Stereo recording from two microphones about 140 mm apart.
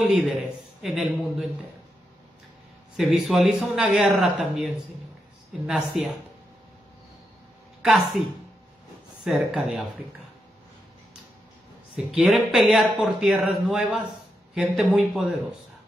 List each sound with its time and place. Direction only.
0.0 s speech: centre (ahead or behind)
3.0 s speech: centre (ahead or behind)
7.8 s speech: 5° right (ahead or behind)
9.2 s speech: 5° right (ahead or behind)
12.1 s speech: 5° right (ahead or behind)